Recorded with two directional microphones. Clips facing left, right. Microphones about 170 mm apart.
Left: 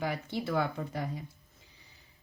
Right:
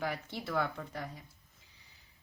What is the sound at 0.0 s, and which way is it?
Speech, centre (ahead or behind).